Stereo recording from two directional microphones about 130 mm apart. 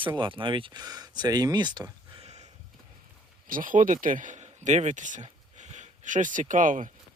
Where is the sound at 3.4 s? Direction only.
90° right.